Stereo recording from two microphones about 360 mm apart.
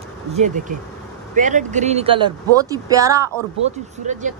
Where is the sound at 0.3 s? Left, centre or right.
Centre.